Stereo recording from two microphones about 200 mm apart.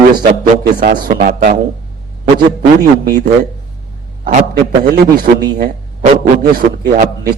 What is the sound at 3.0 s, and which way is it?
A man's voice, 50° right (ahead or behind).